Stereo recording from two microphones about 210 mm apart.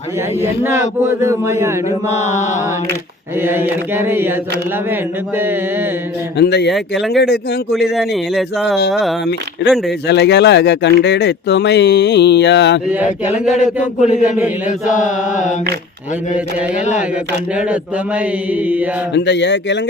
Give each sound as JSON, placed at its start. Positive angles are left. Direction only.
{"t": 1.0, "sound": "chant", "side_deg": -10}
{"t": 2.0, "sound": "chant", "side_deg": 35}
{"t": 3.4, "sound": "chant", "side_deg": -10}
{"t": 6.4, "sound": "speech", "side_deg": 50}
{"t": 8.9, "sound": "a man's voice", "side_deg": 0}
{"t": 10.1, "sound": "speech", "side_deg": 55}
{"t": 13.7, "sound": "a man's voice", "side_deg": -5}
{"t": 14.3, "sound": "chant", "side_deg": -5}
{"t": 14.8, "sound": "chant", "side_deg": 35}
{"t": 19.1, "sound": "speech", "side_deg": 55}